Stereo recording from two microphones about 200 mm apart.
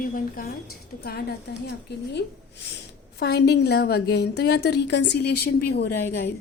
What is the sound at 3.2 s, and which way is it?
A woman's voice, 55° left (ahead or behind).